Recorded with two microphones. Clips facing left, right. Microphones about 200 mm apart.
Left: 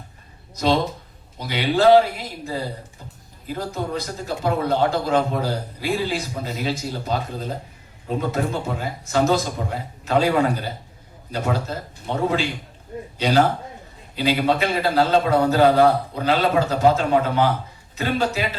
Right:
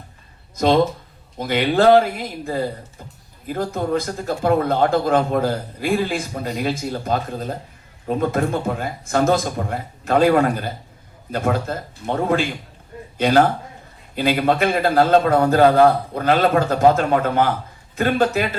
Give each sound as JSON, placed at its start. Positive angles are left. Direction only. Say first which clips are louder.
{"t": 0.5, "sound": "a man's voice", "louder": "right 4 dB", "side_deg": -50}